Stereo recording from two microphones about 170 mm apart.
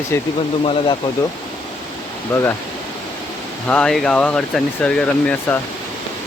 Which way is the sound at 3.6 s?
10° left (ahead or behind).